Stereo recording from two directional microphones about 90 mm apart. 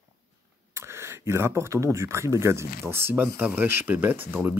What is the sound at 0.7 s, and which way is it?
Speech, 30° right (ahead or behind).